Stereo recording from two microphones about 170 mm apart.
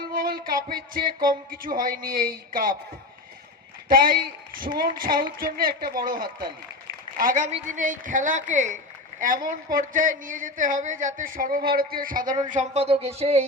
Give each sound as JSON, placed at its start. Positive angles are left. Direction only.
{"t": 0.1, "sound": "music", "side_deg": -60}
{"t": 1.5, "sound": "a woman's voice", "side_deg": -55}
{"t": 3.8, "sound": "a woman's voice", "side_deg": -55}
{"t": 7.2, "sound": "a man's voice", "side_deg": -50}
{"t": 12.5, "sound": "speech", "side_deg": -40}